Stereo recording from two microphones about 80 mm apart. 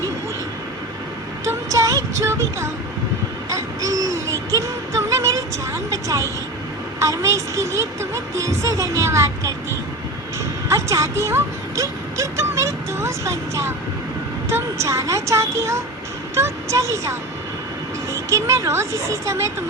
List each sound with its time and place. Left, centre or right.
1.5 s music: right
7.0 s speech: right